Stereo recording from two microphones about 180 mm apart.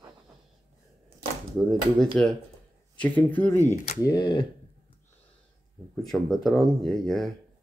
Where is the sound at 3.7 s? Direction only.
40° left (ahead or behind).